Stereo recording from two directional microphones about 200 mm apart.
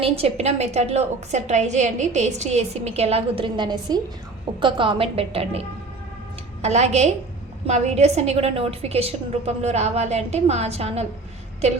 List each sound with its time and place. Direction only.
0.0 s a woman's voice: 30° right (ahead or behind)